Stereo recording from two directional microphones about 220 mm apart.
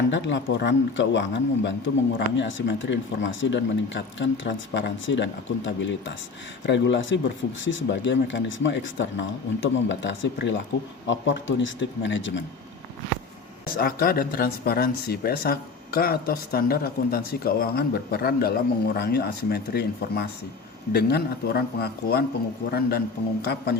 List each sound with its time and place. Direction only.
0.1 s speech: 55° left (ahead or behind)
13.7 s speech: 40° left (ahead or behind)